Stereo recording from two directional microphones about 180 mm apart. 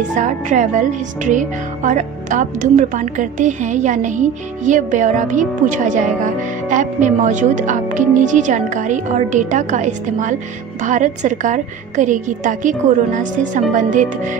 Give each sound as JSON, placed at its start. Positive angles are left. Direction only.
{"t": 0.1, "sound": "speech", "side_deg": -45}